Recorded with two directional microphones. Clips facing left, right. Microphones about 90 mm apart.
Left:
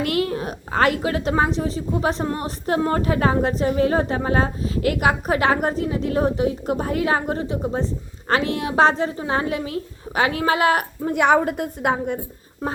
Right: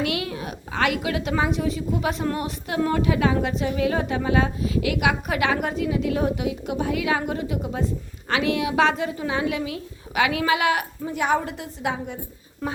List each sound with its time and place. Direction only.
0.0 s a woman's voice: 40° left (ahead or behind)